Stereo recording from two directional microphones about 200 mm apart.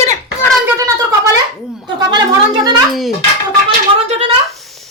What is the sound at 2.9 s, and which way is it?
Speech, centre (ahead or behind).